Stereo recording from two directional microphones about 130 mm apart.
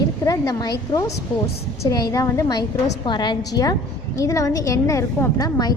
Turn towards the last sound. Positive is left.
turn(degrees=30)  # may be behind; listen again after turning